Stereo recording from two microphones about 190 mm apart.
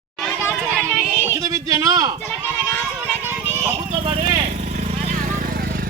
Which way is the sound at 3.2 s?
10° right (ahead or behind).